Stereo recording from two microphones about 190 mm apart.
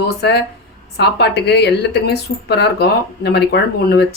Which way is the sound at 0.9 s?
60° left (ahead or behind).